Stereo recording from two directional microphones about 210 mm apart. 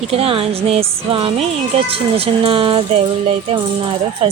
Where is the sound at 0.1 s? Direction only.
25° right (ahead or behind).